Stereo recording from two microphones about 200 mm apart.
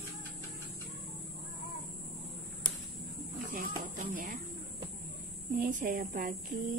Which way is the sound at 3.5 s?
40° right (ahead or behind).